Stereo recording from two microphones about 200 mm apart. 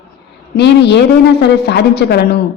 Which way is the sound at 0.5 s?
55° left (ahead or behind).